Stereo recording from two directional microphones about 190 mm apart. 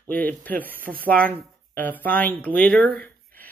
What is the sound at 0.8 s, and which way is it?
Speech, 50° right (ahead or behind).